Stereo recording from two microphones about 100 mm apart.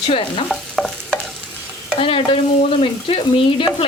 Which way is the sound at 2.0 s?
65° left (ahead or behind).